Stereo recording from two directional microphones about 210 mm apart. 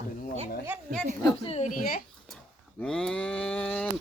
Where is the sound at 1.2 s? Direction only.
20° left (ahead or behind).